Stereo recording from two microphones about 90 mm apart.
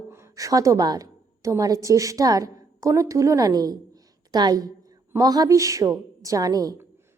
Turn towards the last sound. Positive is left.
turn(degrees=-45)  # may be behind; listen again after turning